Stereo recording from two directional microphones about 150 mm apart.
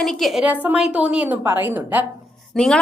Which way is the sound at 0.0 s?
Centre (ahead or behind).